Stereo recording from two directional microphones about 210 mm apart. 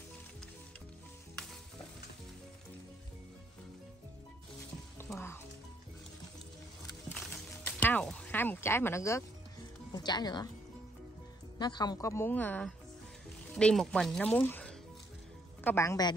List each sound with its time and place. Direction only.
4.9 s music: 10° left (ahead or behind)
7.8 s speech: 5° left (ahead or behind)
11.5 s a woman's voice: 20° left (ahead or behind)